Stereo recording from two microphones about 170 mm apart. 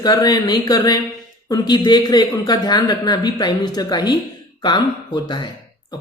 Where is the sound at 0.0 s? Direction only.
20° left (ahead or behind).